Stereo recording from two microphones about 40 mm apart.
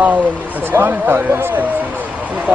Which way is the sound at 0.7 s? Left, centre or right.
Right.